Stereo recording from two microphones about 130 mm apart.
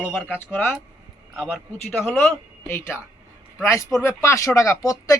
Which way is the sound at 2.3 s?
15° left (ahead or behind).